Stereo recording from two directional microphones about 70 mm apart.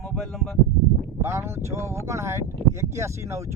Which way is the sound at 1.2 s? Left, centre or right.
Right.